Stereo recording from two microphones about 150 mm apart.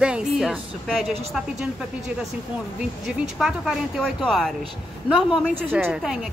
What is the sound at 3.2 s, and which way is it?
A woman's voice, 5° right (ahead or behind).